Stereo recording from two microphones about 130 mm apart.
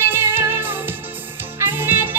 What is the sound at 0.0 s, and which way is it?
Music, 15° right (ahead or behind).